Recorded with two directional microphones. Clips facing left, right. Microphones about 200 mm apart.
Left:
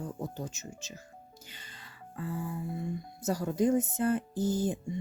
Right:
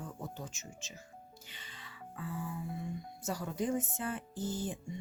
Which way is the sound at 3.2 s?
40° left (ahead or behind).